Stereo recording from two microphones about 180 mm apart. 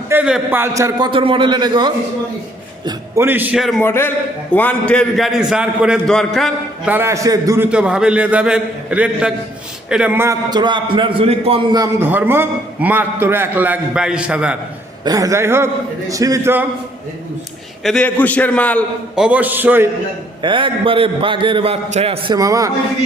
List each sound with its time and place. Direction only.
0.1 s a man's voice: 5° right (ahead or behind); by 1.9 s 25° right (ahead or behind)
2.8 s a man's voice: 10° right (ahead or behind)
3.8 s a man's voice: 15° left (ahead or behind)
6.9 s a man's voice: 15° right (ahead or behind); by 11.8 s 30° right (ahead or behind)
11.8 s a man's voice: 10° right (ahead or behind)
15.0 s a man's voice: 20° right (ahead or behind)
17.8 s a man's voice: 5° left (ahead or behind)
19.1 s a man's voice: 5° right (ahead or behind)
20.4 s a man's voice: 30° right (ahead or behind)
22.4 s a man's voice: 20° right (ahead or behind)